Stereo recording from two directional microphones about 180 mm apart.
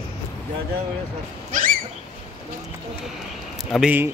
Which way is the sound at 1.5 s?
50° right (ahead or behind).